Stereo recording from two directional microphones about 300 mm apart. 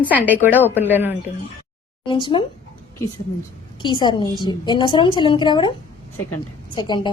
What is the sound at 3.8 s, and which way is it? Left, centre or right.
A woman's voice, centre.